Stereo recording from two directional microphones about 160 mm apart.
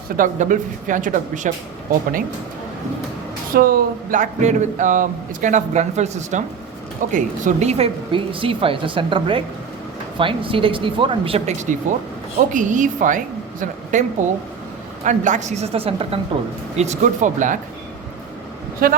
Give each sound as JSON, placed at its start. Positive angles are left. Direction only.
{"t": 0.2, "sound": "speech", "side_deg": -55}
{"t": 3.5, "sound": "a woman's voice", "side_deg": -65}
{"t": 18.8, "sound": "speech", "side_deg": -65}